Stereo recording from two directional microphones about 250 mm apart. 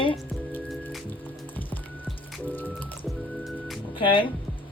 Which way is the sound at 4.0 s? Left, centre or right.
Centre.